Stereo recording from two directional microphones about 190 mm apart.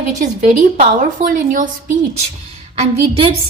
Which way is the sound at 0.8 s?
45° right (ahead or behind).